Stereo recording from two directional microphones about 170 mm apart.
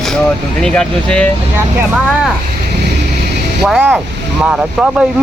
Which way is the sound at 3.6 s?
5° right (ahead or behind).